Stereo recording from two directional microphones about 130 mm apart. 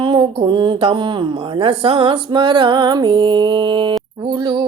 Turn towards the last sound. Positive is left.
turn(degrees=-35)  # may be behind; listen again after turning